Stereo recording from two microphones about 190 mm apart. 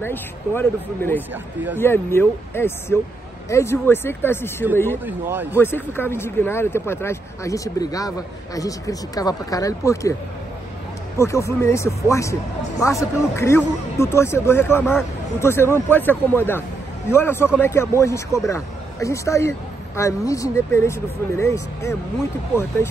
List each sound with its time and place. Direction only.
0.0 s speech: 10° left (ahead or behind)
5.0 s a man's voice: 10° right (ahead or behind)
5.6 s speech: 10° left (ahead or behind)
11.1 s speech: 15° left (ahead or behind)